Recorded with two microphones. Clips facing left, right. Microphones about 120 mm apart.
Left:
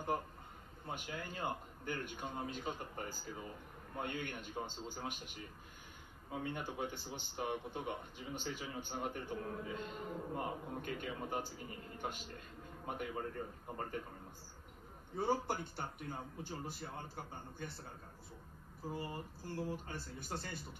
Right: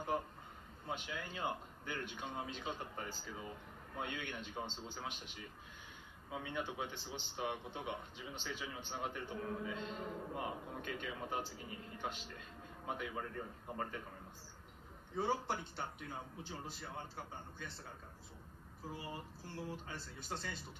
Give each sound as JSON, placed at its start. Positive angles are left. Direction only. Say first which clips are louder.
{"t": 0.8, "sound": "a man's voice", "louder": "even", "side_deg": 50}
{"t": 15.1, "sound": "a man's voice", "louder": "left 1 dB", "side_deg": 50}
{"t": 18.9, "sound": "a man's voice", "louder": "left 3 dB", "side_deg": 50}